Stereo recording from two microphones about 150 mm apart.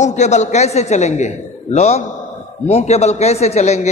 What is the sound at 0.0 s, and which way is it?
A man's voice, 50° left (ahead or behind).